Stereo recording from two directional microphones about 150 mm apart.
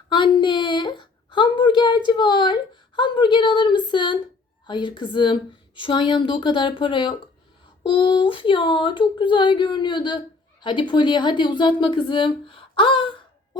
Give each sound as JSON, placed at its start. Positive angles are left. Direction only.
{"t": 0.1, "sound": "a woman's voice", "side_deg": 30}